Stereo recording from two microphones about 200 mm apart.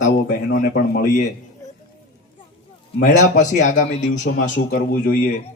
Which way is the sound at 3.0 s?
40° left (ahead or behind).